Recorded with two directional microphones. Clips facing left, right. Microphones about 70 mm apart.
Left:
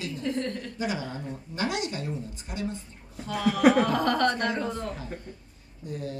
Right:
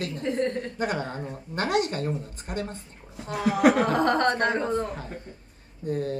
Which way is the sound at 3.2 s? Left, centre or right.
Right.